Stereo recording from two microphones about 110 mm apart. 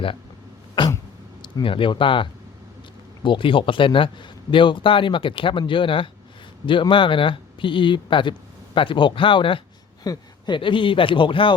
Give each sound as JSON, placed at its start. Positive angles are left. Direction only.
{"t": 1.4, "sound": "speech", "side_deg": 50}
{"t": 10.0, "sound": "speech", "side_deg": 40}